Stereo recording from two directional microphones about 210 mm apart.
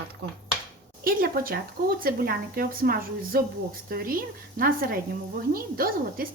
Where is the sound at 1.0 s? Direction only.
45° right (ahead or behind).